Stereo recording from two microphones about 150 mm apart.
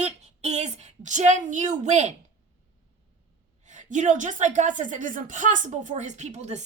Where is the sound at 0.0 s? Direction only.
45° right (ahead or behind).